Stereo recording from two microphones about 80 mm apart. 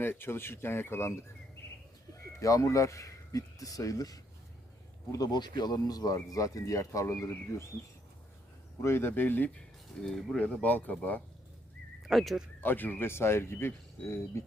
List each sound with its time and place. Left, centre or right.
0.0 s speech: left
2.1 s speech: left
8.8 s speech: left
9.6 s speech: centre
10.3 s speech: centre
12.0 s speech: centre
12.6 s speech: left